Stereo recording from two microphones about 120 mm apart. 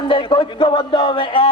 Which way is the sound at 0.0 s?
45° left (ahead or behind).